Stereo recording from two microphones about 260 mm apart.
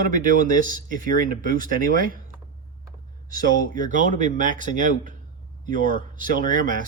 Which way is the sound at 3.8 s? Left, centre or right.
Right.